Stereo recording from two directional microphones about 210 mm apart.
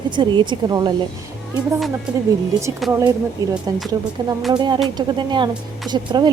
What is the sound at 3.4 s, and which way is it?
A woman's voice, 15° right (ahead or behind).